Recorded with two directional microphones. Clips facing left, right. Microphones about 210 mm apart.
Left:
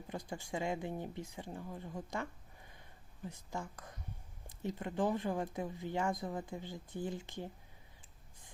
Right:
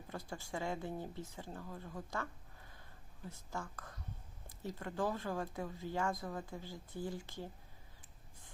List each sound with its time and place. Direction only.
0.1 s speech: 15° left (ahead or behind)
3.2 s speech: 15° left (ahead or behind)